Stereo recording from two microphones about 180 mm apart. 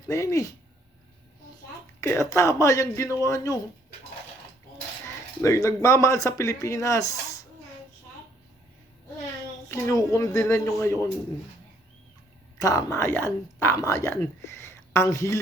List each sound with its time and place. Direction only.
0.1 s speech: 15° left (ahead or behind)
2.0 s speech: 15° left (ahead or behind)
5.0 s speech: 15° left (ahead or behind)
9.6 s speech: 15° left (ahead or behind)
12.5 s speech: 20° left (ahead or behind)